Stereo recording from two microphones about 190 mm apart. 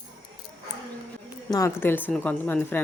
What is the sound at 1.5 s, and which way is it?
Speech, 15° left (ahead or behind).